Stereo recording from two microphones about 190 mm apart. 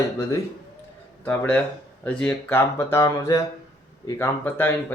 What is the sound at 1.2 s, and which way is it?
Speech, 10° left (ahead or behind).